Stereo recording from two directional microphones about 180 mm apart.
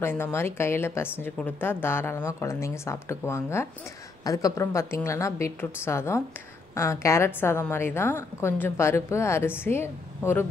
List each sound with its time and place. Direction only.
0.0 s a woman's voice: 15° left (ahead or behind)